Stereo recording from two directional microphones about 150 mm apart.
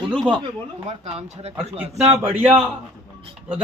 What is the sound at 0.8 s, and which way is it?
Speech, 40° right (ahead or behind).